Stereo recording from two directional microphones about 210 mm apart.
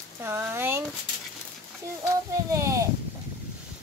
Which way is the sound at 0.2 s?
10° right (ahead or behind).